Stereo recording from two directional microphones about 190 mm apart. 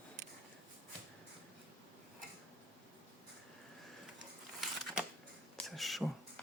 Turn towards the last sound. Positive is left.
turn(degrees=0)  # may be behind; listen again after turning